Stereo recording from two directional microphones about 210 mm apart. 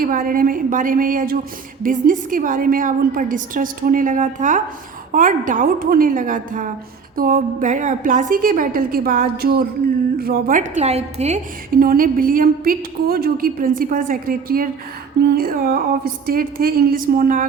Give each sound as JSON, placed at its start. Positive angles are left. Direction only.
{"t": 0.0, "sound": "a woman's voice", "side_deg": -40}
{"t": 11.7, "sound": "a woman's voice", "side_deg": -45}